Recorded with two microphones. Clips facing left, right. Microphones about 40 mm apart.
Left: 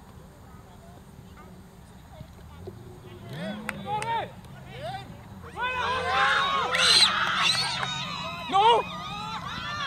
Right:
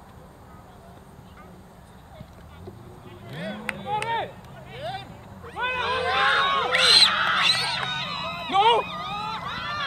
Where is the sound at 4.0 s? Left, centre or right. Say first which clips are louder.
Right 1 dB; right.